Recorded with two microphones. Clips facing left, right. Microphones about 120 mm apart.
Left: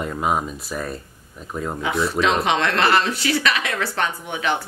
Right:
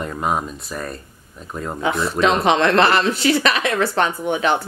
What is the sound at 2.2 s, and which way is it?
Speech, 35° right (ahead or behind).